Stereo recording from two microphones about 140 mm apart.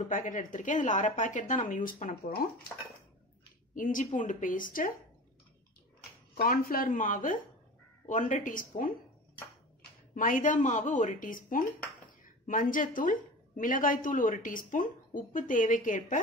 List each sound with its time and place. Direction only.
0.0 s speech: 65° left (ahead or behind); by 2.4 s 90° left
3.7 s a woman's voice: 70° left (ahead or behind)
6.4 s a woman's voice: 90° left; by 8.9 s 75° left (ahead or behind)
10.1 s a woman's voice: 75° left (ahead or behind)